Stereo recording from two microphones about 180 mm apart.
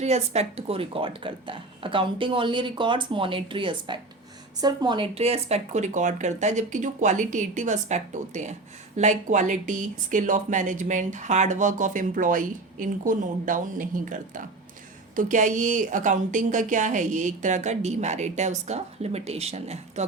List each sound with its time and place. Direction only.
0.0 s speech: 35° right (ahead or behind)